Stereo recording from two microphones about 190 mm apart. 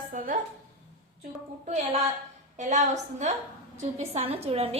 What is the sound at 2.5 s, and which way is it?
A woman's voice, 40° right (ahead or behind).